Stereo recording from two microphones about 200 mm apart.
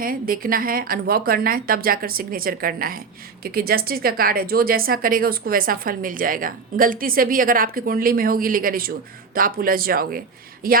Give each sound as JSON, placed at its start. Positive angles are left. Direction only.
{"t": 0.0, "sound": "speech", "side_deg": -45}